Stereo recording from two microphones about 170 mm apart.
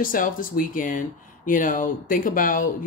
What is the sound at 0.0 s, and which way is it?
Speech, 55° left (ahead or behind).